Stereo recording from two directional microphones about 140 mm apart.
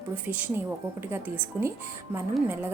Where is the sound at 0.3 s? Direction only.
10° right (ahead or behind).